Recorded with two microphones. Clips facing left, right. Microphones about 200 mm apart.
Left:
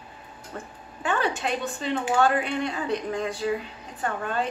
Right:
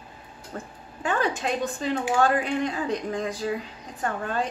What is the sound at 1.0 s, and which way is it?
Speech, 35° right (ahead or behind).